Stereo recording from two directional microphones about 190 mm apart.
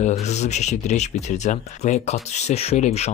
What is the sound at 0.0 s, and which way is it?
Speech, 35° left (ahead or behind).